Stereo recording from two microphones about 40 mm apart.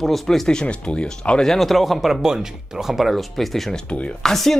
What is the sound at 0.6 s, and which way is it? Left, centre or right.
Speech, left.